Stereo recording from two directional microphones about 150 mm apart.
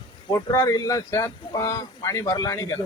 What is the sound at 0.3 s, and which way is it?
Speech, 25° left (ahead or behind).